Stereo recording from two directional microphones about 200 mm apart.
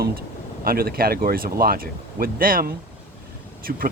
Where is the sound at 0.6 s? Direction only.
50° right (ahead or behind).